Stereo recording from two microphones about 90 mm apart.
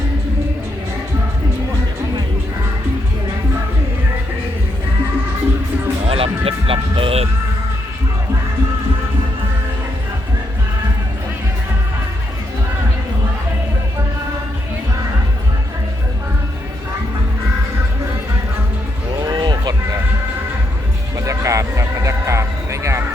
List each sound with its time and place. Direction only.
6.1 s music: 90° right
19.2 s a sound: 50° right (ahead or behind)
21.2 s music: 35° right (ahead or behind)